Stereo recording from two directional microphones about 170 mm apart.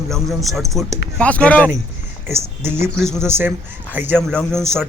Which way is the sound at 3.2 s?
15° right (ahead or behind).